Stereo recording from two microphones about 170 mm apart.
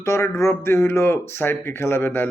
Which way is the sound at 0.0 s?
15° left (ahead or behind).